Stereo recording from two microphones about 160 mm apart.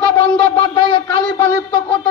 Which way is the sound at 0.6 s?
30° left (ahead or behind).